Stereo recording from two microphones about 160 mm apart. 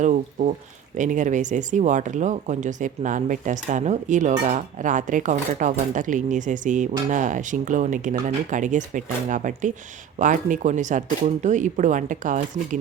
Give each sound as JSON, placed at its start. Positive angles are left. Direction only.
{"t": 0.0, "sound": "speech", "side_deg": -45}